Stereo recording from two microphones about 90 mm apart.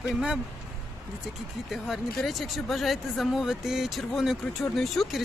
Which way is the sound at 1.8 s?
Centre (ahead or behind).